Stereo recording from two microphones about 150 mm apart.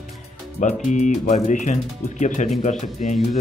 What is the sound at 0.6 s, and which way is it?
Speech, 55° left (ahead or behind).